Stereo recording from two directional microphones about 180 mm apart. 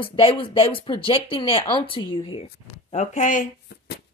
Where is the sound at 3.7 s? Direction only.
65° left (ahead or behind).